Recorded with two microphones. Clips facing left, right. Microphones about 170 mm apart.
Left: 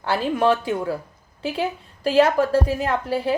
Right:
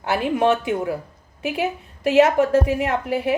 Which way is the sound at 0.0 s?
20° right (ahead or behind).